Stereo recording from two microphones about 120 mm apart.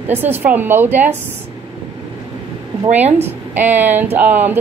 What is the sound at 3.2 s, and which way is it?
A woman's voice, 15° right (ahead or behind).